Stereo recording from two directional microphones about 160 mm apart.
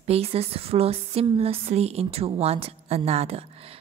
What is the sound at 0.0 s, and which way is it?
Speech, 40° right (ahead or behind).